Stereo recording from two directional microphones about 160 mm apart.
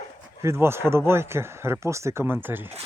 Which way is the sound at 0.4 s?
15° right (ahead or behind).